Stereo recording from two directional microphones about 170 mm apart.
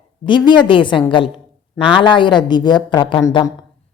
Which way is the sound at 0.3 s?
25° left (ahead or behind).